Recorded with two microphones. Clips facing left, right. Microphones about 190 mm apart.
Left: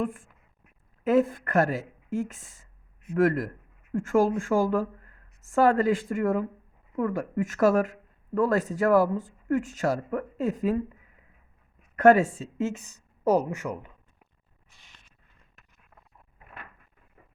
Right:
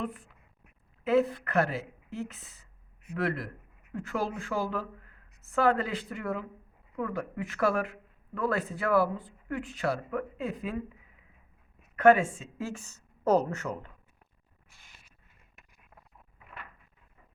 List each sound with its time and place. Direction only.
0.0 s speech: 45° left (ahead or behind)
11.9 s a woman's voice: 40° left (ahead or behind)
12.5 s speech: 20° left (ahead or behind)
14.7 s a sound: 5° right (ahead or behind)